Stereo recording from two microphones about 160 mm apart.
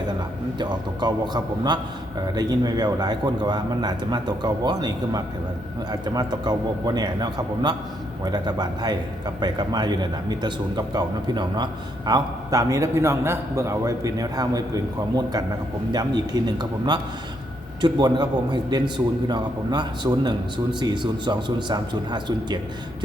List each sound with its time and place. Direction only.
0.6 s a man's voice: 25° right (ahead or behind)